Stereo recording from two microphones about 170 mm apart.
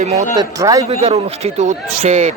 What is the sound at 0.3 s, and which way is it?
Speech, 20° right (ahead or behind).